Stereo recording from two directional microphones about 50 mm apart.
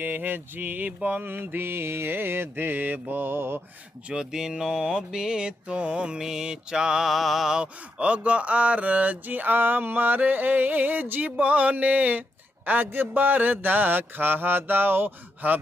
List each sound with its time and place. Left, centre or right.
0.0 s mantra: right
4.1 s mantra: centre
7.1 s mantra: centre
7.5 s a sound: right